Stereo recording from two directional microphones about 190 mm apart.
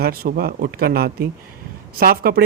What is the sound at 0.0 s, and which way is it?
Speech, 50° right (ahead or behind).